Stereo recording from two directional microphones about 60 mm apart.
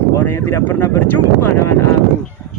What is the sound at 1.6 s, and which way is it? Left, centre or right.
Speech, left.